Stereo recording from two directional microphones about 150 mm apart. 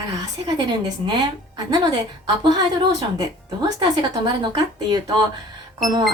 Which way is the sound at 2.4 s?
30° right (ahead or behind).